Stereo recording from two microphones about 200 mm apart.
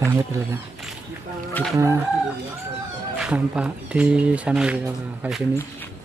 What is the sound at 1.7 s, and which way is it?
Speech, 15° right (ahead or behind).